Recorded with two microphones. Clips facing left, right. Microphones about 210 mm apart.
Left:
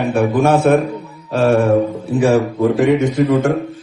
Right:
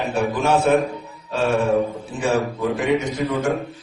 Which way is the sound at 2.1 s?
60° left (ahead or behind).